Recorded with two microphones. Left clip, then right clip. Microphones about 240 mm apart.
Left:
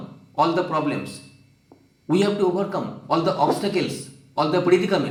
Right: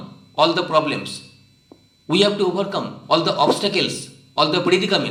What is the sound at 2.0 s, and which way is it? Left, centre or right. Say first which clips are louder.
A man's voice: right 3 dB; right.